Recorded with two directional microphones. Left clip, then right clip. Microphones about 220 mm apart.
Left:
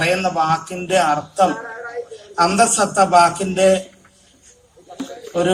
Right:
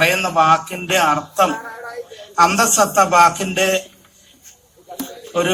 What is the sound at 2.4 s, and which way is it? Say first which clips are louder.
A man's voice: right 1 dB; 15° left (ahead or behind).